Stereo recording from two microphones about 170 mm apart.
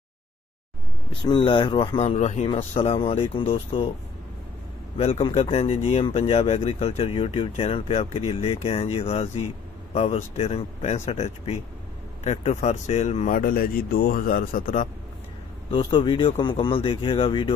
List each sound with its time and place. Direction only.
1.1 s speech: 30° left (ahead or behind)
4.9 s speech: 35° left (ahead or behind); by 14.9 s 55° left (ahead or behind)
15.7 s speech: 30° left (ahead or behind)